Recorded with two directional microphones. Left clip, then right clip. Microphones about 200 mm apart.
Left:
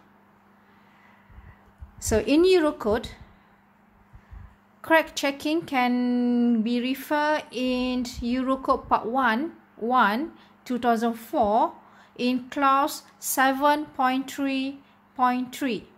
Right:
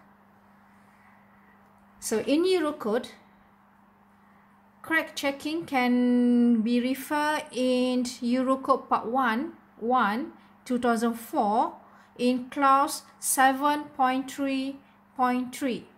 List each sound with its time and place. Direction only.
2.0 s speech: 30° left (ahead or behind)
4.8 s a woman's voice: 30° left (ahead or behind)